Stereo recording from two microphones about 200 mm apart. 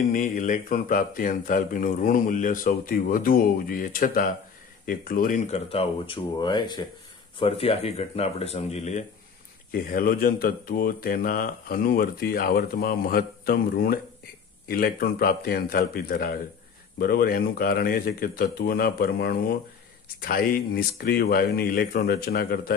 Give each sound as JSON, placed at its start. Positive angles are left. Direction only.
{"t": 0.1, "sound": "speech", "side_deg": 40}
{"t": 5.7, "sound": "speech", "side_deg": 30}
{"t": 9.7, "sound": "speech", "side_deg": 45}